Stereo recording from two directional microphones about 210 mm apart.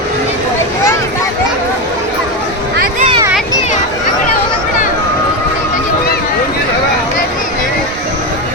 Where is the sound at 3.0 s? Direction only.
25° right (ahead or behind).